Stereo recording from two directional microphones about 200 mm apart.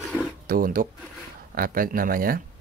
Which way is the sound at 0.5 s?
45° right (ahead or behind).